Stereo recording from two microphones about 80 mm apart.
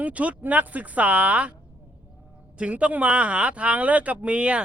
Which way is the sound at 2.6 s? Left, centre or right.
Centre.